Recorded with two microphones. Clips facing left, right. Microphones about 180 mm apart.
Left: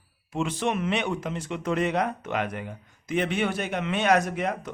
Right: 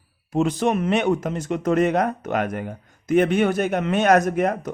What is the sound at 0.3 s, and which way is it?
Speech, 40° right (ahead or behind).